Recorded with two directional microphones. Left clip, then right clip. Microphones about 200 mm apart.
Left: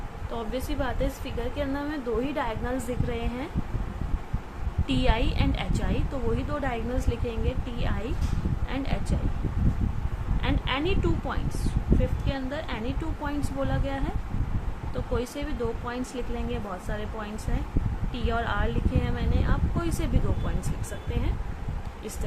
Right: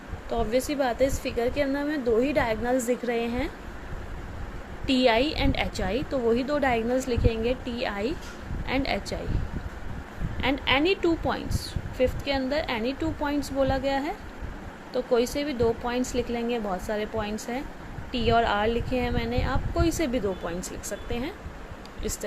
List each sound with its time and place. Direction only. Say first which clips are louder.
0.3 s a woman's voice: right 7 dB; 20° right (ahead or behind)
4.9 s a woman's voice: right 6 dB; 20° right (ahead or behind)
10.4 s a woman's voice: right 5 dB; 20° right (ahead or behind)
15.1 s a woman's voice: right 7 dB; 20° right (ahead or behind)